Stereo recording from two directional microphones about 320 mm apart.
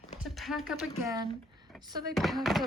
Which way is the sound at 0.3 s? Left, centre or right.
Centre.